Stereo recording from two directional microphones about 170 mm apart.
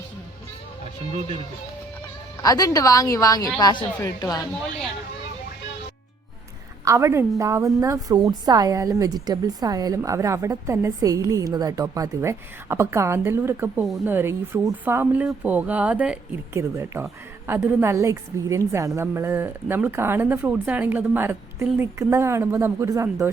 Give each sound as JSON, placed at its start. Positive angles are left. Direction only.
{"t": 2.4, "sound": "a woman's voice", "side_deg": 20}
{"t": 6.8, "sound": "a woman's voice", "side_deg": -20}